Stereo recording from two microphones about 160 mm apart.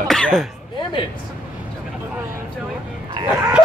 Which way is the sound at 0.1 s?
5° left (ahead or behind).